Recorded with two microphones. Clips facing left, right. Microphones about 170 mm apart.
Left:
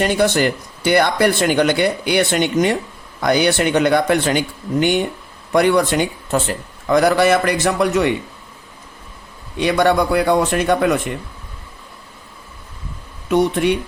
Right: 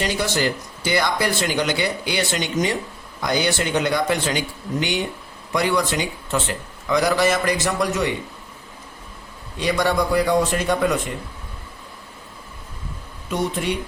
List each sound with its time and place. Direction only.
0.0 s speech: 55° left (ahead or behind)
9.6 s speech: 60° left (ahead or behind)
13.3 s speech: 65° left (ahead or behind)